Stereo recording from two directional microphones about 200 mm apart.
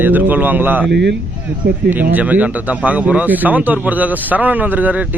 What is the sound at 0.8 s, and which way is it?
Speech, 60° right (ahead or behind).